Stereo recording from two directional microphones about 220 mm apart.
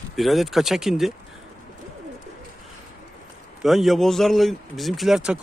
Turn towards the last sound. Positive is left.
turn(degrees=-5)  # may be behind; listen again after turning